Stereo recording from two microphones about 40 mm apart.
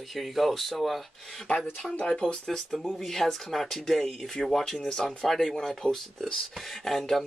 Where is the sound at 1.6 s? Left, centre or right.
Centre.